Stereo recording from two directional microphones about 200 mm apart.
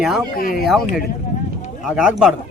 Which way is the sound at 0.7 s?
Centre (ahead or behind).